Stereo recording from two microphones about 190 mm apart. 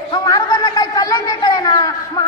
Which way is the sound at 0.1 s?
20° left (ahead or behind).